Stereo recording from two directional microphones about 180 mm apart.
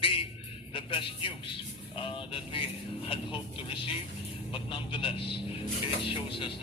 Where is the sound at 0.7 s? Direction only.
30° left (ahead or behind).